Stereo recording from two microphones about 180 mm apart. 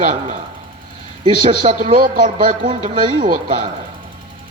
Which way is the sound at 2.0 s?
55° right (ahead or behind).